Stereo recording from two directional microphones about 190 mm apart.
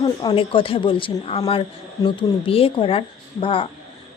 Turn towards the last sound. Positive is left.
turn(degrees=30)  # may be behind; listen again after turning